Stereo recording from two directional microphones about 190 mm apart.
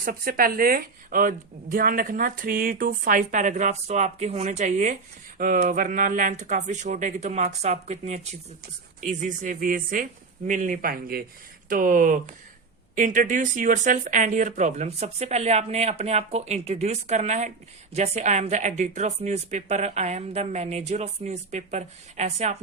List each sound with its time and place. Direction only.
0.0 s a woman's voice: 50° right (ahead or behind)